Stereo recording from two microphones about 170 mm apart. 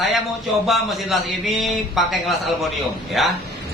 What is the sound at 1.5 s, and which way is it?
A man's voice, centre (ahead or behind).